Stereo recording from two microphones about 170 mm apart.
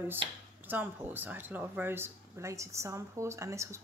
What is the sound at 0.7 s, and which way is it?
A woman's voice, 10° right (ahead or behind).